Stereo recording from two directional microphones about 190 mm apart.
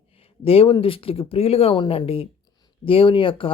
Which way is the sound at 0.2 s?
30° left (ahead or behind).